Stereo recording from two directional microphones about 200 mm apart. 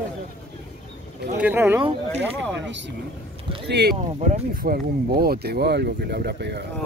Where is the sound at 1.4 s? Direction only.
10° right (ahead or behind).